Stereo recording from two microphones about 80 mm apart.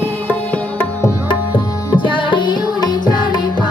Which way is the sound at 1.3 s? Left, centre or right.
Left.